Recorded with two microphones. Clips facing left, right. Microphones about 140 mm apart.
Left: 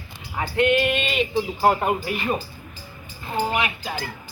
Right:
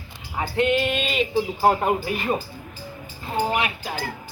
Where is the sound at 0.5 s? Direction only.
35° right (ahead or behind).